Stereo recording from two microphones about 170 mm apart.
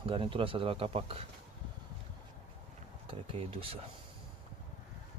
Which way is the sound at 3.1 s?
35° right (ahead or behind).